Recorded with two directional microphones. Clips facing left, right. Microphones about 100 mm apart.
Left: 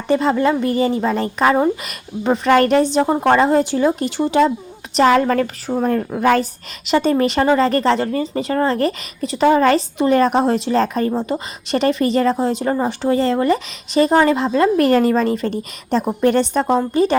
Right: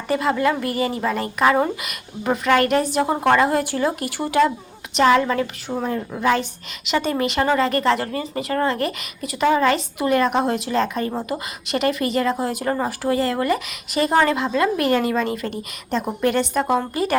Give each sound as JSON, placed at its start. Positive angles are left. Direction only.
{"t": 0.1, "sound": "a woman's voice", "side_deg": 30}
{"t": 4.9, "sound": "a woman's voice", "side_deg": 40}